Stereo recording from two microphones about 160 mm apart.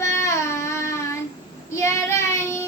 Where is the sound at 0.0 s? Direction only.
15° left (ahead or behind).